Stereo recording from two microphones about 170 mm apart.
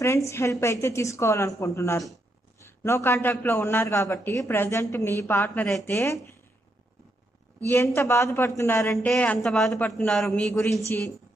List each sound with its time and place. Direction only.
0.0 s a man's voice: 15° left (ahead or behind)
7.6 s a man's voice: 15° left (ahead or behind)
8.9 s a man's voice: 5° left (ahead or behind)